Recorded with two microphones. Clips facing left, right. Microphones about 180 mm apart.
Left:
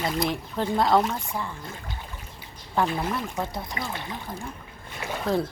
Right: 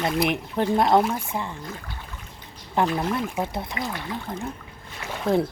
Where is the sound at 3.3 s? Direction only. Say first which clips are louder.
Right 3 dB; 20° right (ahead or behind).